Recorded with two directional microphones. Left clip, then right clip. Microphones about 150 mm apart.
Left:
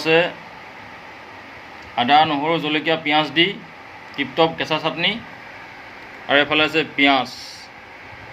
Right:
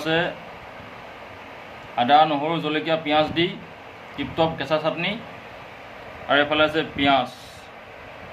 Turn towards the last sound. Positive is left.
turn(degrees=20)  # may be behind; listen again after turning